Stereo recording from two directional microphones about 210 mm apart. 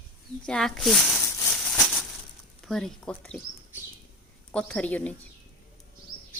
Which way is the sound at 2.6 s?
Centre (ahead or behind).